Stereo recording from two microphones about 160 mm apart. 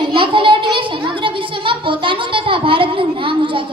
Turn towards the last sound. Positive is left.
turn(degrees=-35)  # may be behind; listen again after turning